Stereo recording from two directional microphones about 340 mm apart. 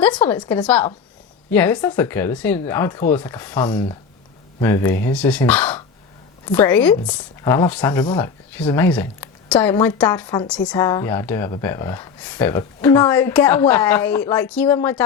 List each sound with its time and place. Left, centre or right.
0.0 s speech: centre